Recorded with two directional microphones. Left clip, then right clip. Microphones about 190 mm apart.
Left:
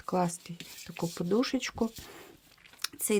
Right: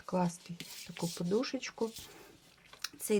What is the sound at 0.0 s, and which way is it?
Speech, 45° left (ahead or behind).